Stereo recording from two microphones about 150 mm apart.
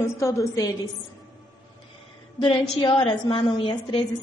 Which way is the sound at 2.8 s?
30° left (ahead or behind).